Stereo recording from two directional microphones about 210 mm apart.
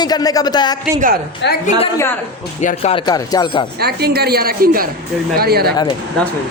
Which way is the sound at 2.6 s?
30° left (ahead or behind).